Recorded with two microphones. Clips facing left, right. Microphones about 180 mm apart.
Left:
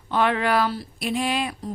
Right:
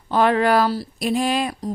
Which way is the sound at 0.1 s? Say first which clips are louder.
Right 5 dB; 40° right (ahead or behind).